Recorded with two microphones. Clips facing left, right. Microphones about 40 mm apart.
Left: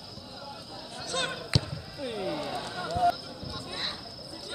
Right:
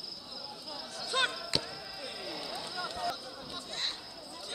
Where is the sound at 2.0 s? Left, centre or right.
Left.